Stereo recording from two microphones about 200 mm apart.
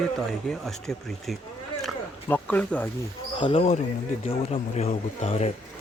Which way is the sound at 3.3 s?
25° left (ahead or behind).